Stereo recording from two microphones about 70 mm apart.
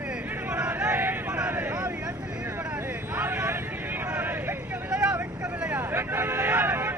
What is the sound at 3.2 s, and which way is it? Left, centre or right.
Vehicle, right.